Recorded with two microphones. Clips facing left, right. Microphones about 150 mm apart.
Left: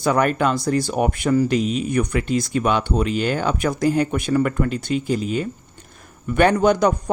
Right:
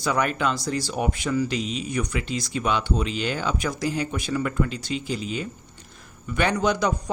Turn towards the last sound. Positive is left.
turn(degrees=50)  # may be behind; listen again after turning